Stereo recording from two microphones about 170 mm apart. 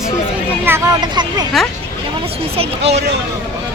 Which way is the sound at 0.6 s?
15° right (ahead or behind).